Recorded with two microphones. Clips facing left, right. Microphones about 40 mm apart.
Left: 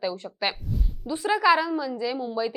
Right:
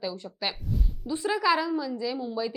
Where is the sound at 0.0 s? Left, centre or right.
Centre.